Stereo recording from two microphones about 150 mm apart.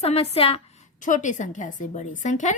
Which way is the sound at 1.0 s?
60° left (ahead or behind).